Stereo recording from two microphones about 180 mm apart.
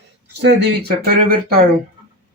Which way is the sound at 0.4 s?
60° right (ahead or behind).